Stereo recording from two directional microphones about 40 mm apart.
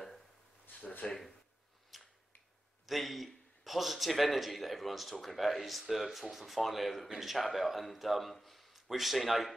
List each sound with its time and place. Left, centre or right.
0.7 s a sound: left
1.9 s finger snapping: centre
2.9 s a man's voice: centre